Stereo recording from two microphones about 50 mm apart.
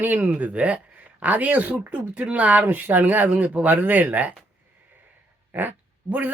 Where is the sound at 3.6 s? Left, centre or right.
Right.